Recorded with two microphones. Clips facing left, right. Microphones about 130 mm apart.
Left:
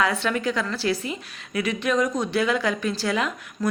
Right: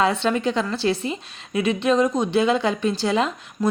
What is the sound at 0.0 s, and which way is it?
A woman's voice, 25° right (ahead or behind).